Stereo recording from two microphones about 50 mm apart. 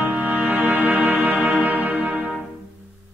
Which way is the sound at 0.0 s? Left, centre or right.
Right.